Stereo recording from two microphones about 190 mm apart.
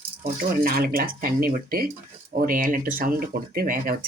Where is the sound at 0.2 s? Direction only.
45° right (ahead or behind).